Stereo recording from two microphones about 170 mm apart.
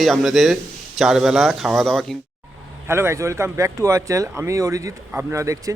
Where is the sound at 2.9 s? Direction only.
15° right (ahead or behind).